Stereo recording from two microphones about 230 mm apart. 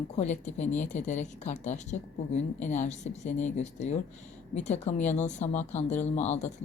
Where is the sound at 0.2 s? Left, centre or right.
Left.